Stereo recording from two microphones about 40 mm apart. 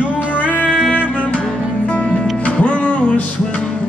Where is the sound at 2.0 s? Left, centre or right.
Left.